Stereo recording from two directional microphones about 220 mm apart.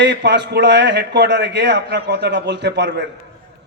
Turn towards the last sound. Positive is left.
turn(degrees=-50)  # may be behind; listen again after turning